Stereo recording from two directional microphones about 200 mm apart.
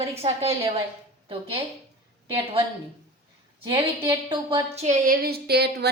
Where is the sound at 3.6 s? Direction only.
15° right (ahead or behind).